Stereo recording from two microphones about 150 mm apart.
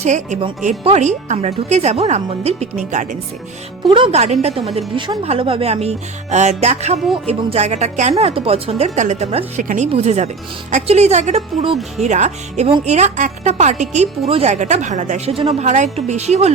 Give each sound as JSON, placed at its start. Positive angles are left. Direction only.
{"t": 0.0, "sound": "speech", "side_deg": -50}
{"t": 3.8, "sound": "speech", "side_deg": -35}
{"t": 8.2, "sound": "speech", "side_deg": -40}
{"t": 15.6, "sound": "speech", "side_deg": -50}